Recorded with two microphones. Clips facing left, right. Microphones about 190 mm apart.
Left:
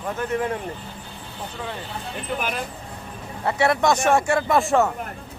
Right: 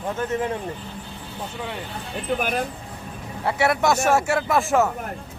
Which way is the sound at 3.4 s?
5° right (ahead or behind).